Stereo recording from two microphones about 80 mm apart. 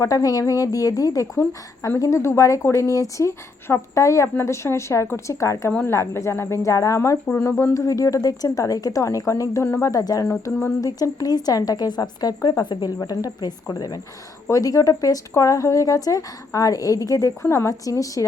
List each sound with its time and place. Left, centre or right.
0.0 s a woman's voice: left
7.6 s a woman's voice: left
13.0 s a woman's voice: left
17.4 s speech: left